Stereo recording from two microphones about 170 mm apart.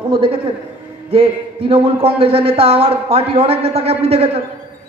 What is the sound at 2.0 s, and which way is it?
A man's voice, 35° right (ahead or behind).